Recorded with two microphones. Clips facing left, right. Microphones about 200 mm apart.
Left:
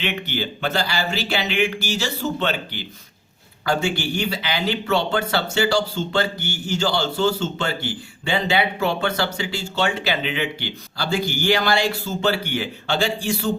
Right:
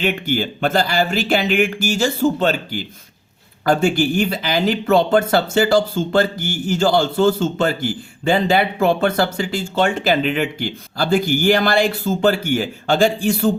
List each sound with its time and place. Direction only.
0.0 s speech: 45° right (ahead or behind)